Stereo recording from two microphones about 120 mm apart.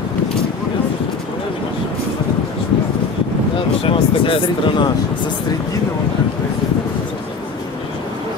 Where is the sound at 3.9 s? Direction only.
45° left (ahead or behind).